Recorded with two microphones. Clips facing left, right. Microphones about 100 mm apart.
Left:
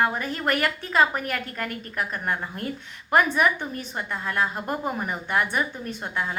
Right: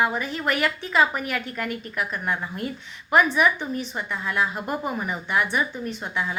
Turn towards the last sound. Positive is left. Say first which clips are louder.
# right 1 dB
turn(degrees=50)  # may be behind; listen again after turning